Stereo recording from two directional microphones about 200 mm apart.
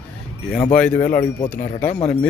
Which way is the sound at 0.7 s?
5° left (ahead or behind).